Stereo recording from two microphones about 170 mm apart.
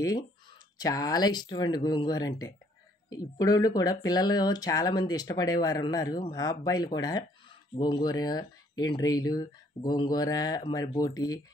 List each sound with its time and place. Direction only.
0.0 s speech: 25° left (ahead or behind)